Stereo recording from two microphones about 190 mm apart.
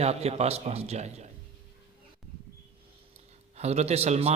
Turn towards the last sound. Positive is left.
turn(degrees=-35)  # may be behind; listen again after turning